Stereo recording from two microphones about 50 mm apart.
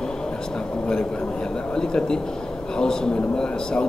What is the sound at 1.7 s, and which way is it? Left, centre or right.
Speech, centre.